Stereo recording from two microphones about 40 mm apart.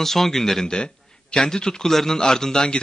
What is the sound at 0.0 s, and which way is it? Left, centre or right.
Speech, centre.